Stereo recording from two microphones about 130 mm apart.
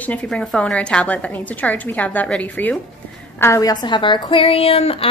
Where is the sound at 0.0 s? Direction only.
10° left (ahead or behind).